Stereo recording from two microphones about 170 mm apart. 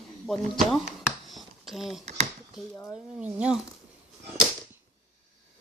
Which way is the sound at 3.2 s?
5° right (ahead or behind).